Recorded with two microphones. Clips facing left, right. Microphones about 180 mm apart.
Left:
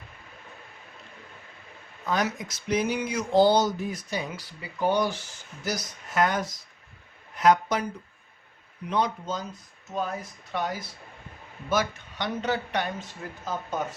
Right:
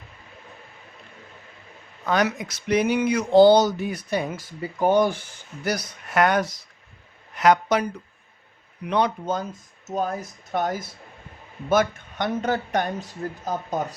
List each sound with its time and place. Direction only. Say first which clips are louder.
2.0 s speech: right 5 dB; 70° right (ahead or behind)
8.9 s speech: right 4 dB; 70° right (ahead or behind)
9.9 s speech: right 4 dB; 40° right (ahead or behind)